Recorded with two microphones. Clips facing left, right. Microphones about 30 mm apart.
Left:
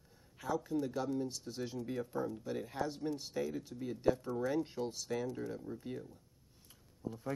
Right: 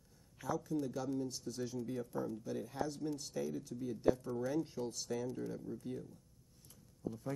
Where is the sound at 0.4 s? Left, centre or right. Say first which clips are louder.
Left 2 dB; left.